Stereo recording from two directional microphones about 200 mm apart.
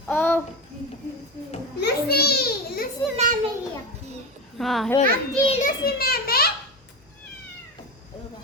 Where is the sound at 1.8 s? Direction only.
50° left (ahead or behind).